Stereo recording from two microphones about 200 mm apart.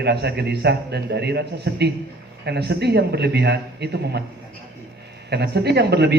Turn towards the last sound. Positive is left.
turn(degrees=-55)  # may be behind; listen again after turning